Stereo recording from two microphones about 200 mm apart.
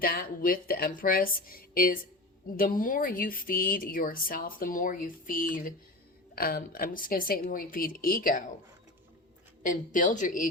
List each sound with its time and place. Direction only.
0.0 s speech: 45° left (ahead or behind)
9.6 s a woman's voice: 40° left (ahead or behind)